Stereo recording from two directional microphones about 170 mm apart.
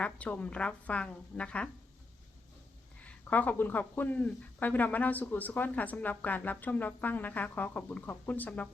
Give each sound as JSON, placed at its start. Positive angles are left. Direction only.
{"t": 0.0, "sound": "speech", "side_deg": 5}
{"t": 3.0, "sound": "speech", "side_deg": 10}